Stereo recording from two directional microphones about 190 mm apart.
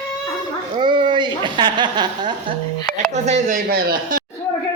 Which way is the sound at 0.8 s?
25° right (ahead or behind).